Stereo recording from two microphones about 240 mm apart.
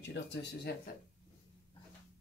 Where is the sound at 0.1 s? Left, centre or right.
Left.